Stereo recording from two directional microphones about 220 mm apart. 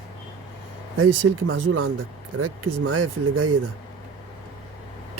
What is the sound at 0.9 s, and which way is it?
Speech, 60° right (ahead or behind).